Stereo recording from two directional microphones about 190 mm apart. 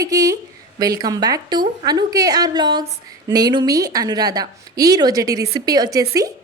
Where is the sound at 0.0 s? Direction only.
20° right (ahead or behind).